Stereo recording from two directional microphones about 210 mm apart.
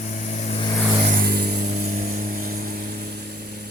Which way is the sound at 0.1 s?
35° left (ahead or behind).